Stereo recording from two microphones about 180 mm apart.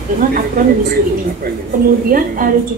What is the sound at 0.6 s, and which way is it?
Speech, 55° right (ahead or behind).